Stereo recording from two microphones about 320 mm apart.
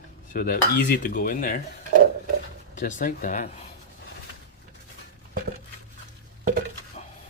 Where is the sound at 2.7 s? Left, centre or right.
Left.